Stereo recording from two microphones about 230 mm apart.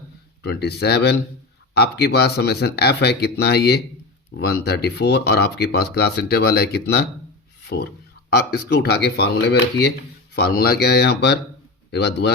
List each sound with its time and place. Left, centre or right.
0.4 s speech: left
7.6 s a sound: left
8.4 s a man's voice: left